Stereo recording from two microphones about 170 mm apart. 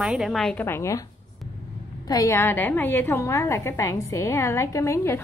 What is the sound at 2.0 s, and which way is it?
A woman's voice, 20° left (ahead or behind).